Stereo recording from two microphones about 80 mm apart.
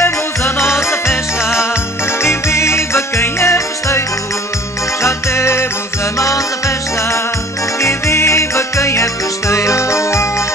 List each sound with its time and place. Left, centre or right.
0.0 s music: left
5.0 s music: left
7.8 s music: left